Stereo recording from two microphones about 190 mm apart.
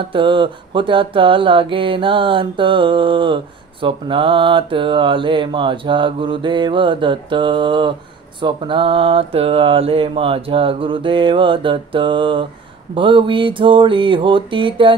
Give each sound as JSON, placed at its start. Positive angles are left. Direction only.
{"t": 0.1, "sound": "speech", "side_deg": -25}